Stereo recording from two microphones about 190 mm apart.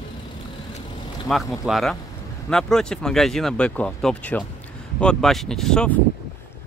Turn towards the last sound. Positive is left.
turn(degrees=5)  # may be behind; listen again after turning